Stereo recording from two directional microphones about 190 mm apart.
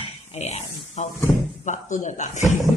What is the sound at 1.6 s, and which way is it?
Speech, 40° left (ahead or behind).